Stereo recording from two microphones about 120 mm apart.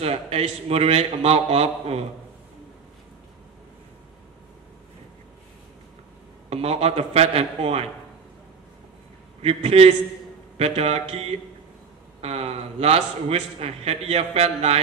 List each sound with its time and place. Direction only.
0.0 s a man's voice: 60° right (ahead or behind)
6.5 s a man's voice: 60° right (ahead or behind)
9.4 s a man's voice: 60° right (ahead or behind)